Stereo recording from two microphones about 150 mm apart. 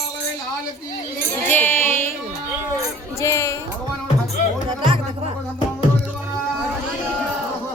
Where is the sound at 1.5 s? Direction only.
15° left (ahead or behind).